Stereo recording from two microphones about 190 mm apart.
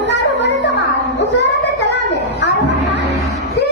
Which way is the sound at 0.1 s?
65° left (ahead or behind).